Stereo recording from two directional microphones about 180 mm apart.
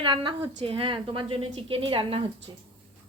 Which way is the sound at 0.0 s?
30° right (ahead or behind).